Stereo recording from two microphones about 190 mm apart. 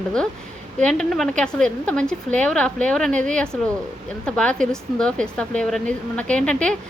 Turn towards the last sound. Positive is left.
turn(degrees=5)  # may be behind; listen again after turning